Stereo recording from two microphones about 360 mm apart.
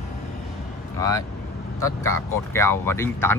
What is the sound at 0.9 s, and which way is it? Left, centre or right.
Speech, centre.